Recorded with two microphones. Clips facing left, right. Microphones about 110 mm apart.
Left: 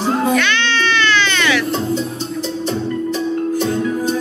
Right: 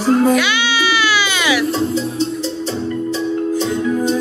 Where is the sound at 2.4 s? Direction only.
25° right (ahead or behind).